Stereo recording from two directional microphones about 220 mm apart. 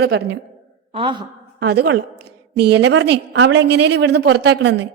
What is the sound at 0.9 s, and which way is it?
Speech, 20° right (ahead or behind).